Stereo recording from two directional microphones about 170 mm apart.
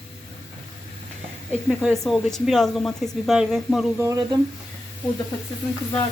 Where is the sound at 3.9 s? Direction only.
15° right (ahead or behind).